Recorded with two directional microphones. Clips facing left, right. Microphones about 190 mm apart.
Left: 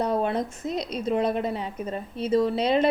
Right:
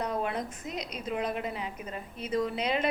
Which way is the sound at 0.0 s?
30° left (ahead or behind).